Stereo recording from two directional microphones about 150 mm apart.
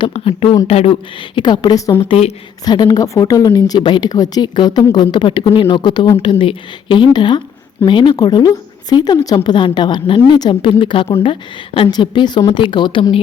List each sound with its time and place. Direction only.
0.0 s a woman's voice: 40° left (ahead or behind)
1.4 s a woman's voice: 30° left (ahead or behind)
2.6 s a woman's voice: 25° left (ahead or behind)